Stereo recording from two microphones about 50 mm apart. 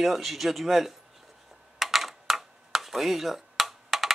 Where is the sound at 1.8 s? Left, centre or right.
Centre.